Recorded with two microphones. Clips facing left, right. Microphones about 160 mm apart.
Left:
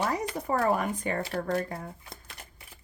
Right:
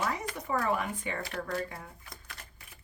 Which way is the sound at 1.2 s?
30° left (ahead or behind).